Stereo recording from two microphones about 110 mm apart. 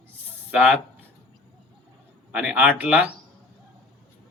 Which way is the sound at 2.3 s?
15° right (ahead or behind).